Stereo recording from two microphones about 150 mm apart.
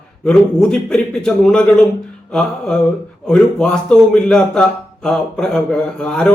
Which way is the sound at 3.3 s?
5° left (ahead or behind).